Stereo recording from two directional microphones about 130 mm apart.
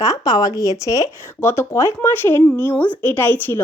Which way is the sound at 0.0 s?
25° left (ahead or behind).